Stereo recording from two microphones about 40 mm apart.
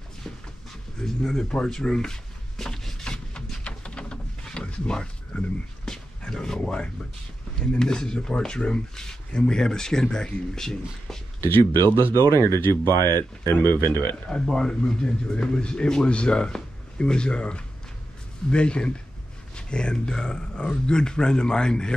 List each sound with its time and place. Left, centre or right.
1.0 s speech: centre
1.5 s a sound: centre
4.8 s speech: left
5.9 s a sound: centre
7.8 s speech: centre
11.4 s speech: left
14.2 s speech: centre